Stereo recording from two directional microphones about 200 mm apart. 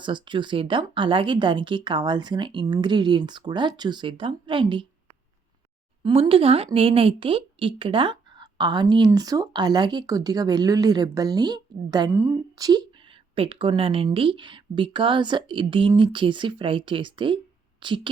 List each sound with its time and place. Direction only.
0.0 s a woman's voice: 25° right (ahead or behind)
6.0 s a woman's voice: 25° right (ahead or behind)